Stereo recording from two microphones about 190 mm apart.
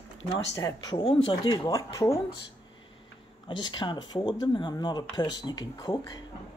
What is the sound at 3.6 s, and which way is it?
Speech, 25° left (ahead or behind).